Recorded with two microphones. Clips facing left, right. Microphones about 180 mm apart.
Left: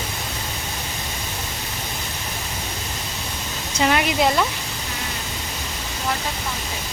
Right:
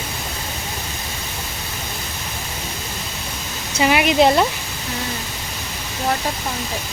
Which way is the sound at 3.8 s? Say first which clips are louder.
Right 4 dB; 15° right (ahead or behind).